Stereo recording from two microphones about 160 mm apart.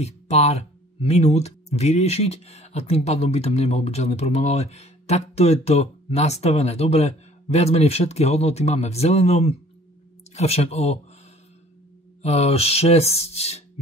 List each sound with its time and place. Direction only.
0.0 s speech: 40° left (ahead or behind)
12.2 s speech: 40° left (ahead or behind)